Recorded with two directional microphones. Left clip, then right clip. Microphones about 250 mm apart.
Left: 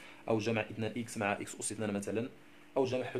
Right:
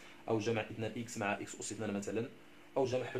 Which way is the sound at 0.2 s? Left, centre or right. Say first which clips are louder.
Left 2 dB; left.